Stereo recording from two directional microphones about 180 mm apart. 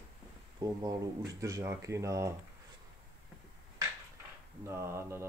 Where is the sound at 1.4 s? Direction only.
15° right (ahead or behind).